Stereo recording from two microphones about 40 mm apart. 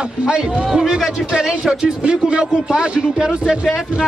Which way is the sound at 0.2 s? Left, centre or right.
Centre.